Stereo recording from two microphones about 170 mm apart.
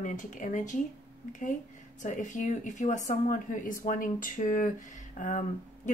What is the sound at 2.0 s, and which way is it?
A woman's voice, 45° left (ahead or behind).